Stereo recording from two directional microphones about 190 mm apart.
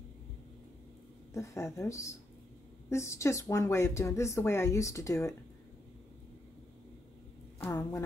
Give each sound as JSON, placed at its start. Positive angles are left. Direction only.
{"t": 1.3, "sound": "a woman's voice", "side_deg": 15}
{"t": 7.6, "sound": "a woman's voice", "side_deg": 15}